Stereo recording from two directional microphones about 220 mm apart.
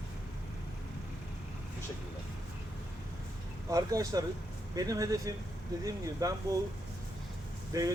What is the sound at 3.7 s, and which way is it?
Speech, 15° right (ahead or behind).